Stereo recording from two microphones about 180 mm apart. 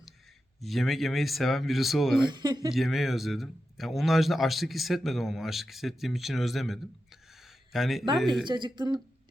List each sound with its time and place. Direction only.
0.6 s speech: centre (ahead or behind)
2.2 s speech: 25° right (ahead or behind)
2.7 s speech: centre (ahead or behind)
8.4 s speech: 25° right (ahead or behind)